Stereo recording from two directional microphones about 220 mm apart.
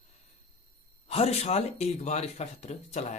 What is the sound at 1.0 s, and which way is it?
Speech, 30° left (ahead or behind).